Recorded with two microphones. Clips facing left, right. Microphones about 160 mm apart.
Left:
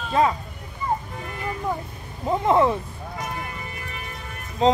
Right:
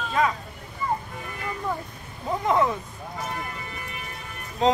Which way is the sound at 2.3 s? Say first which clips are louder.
Left 4 dB; 25° left (ahead or behind).